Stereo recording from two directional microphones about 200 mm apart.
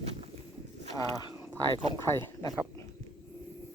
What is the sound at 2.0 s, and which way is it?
Speech, 15° left (ahead or behind).